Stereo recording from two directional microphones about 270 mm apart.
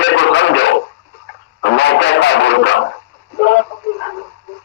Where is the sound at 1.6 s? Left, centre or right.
Left.